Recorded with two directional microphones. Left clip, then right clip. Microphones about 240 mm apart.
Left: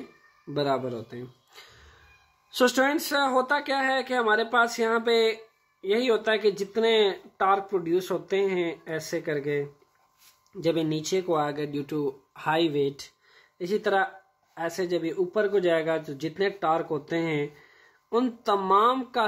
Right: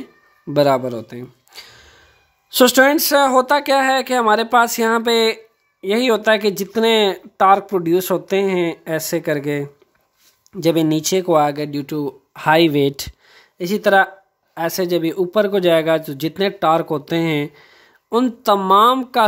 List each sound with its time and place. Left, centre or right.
0.5 s speech: right